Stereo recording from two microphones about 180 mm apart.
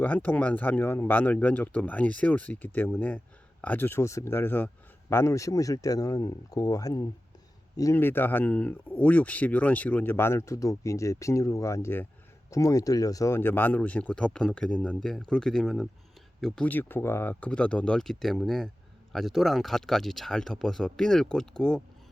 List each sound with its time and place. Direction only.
0.0 s speech: 10° left (ahead or behind)